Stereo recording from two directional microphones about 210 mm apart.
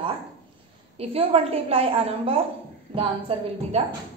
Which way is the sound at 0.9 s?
25° right (ahead or behind).